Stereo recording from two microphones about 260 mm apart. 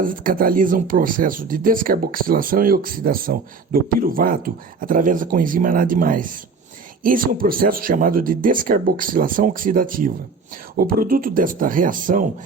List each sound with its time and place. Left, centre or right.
0.0 s speech: right